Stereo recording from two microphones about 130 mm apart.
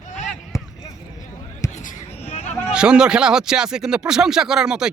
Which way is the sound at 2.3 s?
60° left (ahead or behind).